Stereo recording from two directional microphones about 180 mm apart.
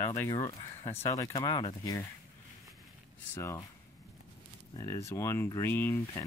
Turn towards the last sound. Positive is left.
turn(degrees=15)  # may be behind; listen again after turning